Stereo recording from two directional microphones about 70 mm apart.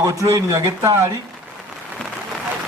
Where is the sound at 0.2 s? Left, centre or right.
Right.